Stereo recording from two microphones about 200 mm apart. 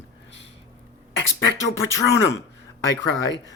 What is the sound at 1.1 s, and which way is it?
Speech, 70° left (ahead or behind).